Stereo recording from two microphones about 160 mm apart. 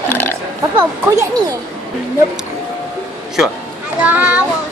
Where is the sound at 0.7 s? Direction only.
15° right (ahead or behind).